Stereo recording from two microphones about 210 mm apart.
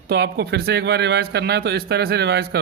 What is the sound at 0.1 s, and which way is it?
A man's voice, 50° right (ahead or behind).